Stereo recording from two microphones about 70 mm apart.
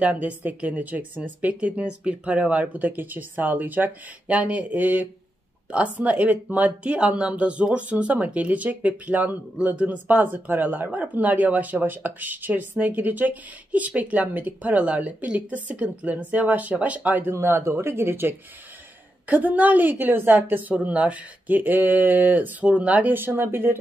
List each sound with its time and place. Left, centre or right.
0.0 s speech: right
17.3 s speech: right
19.2 s speech: right